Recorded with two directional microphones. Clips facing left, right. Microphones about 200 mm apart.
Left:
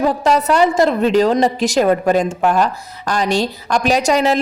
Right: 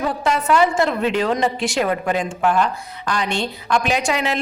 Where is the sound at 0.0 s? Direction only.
40° left (ahead or behind).